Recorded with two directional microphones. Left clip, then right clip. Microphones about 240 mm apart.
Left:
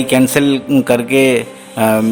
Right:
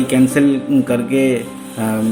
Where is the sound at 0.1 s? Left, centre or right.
Left.